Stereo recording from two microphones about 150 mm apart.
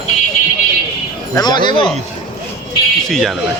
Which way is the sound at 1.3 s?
30° left (ahead or behind).